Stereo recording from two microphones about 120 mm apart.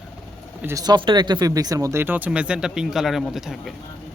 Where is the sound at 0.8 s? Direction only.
35° right (ahead or behind).